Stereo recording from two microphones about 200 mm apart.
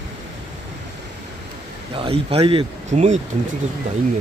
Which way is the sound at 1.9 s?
30° right (ahead or behind).